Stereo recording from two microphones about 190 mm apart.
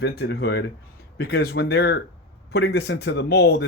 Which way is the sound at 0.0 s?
55° left (ahead or behind).